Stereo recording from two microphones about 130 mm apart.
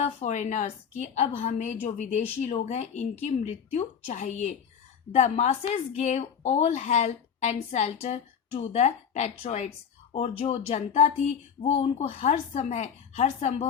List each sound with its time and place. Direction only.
0.0 s speech: 65° left (ahead or behind)